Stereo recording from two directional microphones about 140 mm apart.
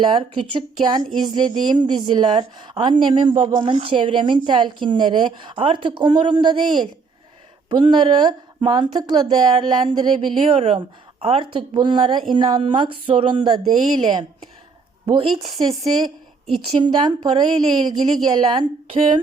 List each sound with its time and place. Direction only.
0.0 s a woman's voice: 35° right (ahead or behind)